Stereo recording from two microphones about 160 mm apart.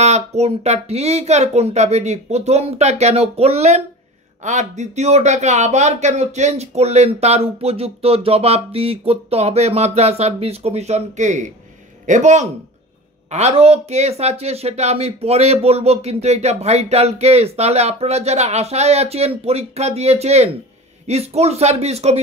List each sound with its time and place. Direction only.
0.0 s speech: 45° right (ahead or behind)